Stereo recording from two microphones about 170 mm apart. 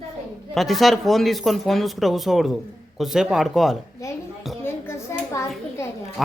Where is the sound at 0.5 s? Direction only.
Centre (ahead or behind).